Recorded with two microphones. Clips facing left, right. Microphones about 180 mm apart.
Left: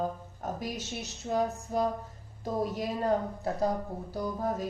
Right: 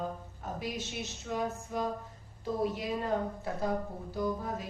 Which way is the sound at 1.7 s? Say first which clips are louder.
Left 5 dB; 35° left (ahead or behind).